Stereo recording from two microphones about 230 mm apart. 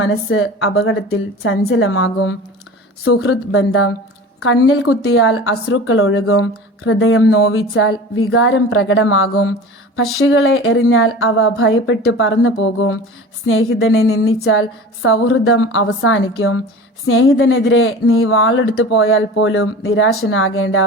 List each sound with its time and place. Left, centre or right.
0.1 s a woman's voice: left
14.3 s a woman's voice: left
14.6 s a woman's voice: left